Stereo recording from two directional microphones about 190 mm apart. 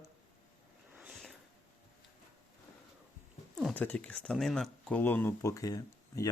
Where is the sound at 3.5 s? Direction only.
5° left (ahead or behind).